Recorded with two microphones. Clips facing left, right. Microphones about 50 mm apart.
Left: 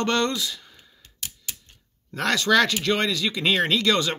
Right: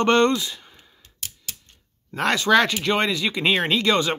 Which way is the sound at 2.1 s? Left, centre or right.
Centre.